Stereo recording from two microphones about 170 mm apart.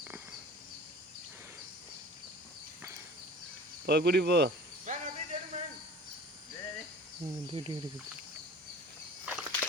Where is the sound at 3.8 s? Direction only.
70° right (ahead or behind).